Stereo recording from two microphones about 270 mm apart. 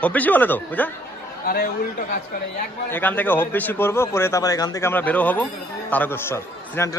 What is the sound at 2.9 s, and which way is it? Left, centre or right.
Speech, centre.